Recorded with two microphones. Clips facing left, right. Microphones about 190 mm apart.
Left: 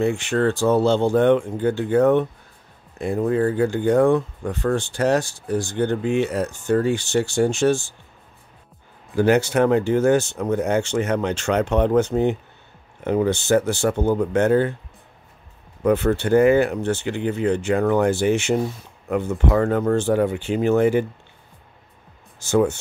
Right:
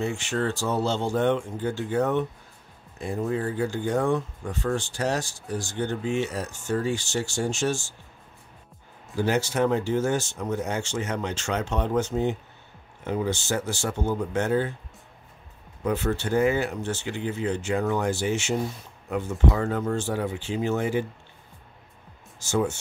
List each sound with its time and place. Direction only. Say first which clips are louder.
0.0 s speech: left 7 dB; 60° left (ahead or behind)
9.1 s speech: left 7 dB; 60° left (ahead or behind)
15.8 s speech: left 7 dB; 60° left (ahead or behind)
22.4 s speech: left 7 dB; 60° left (ahead or behind)